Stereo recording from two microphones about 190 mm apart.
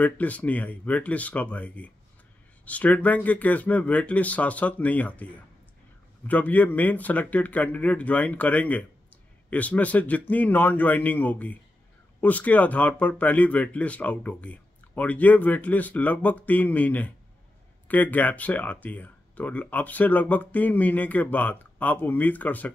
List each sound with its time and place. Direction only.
0.0 s speech: 10° left (ahead or behind)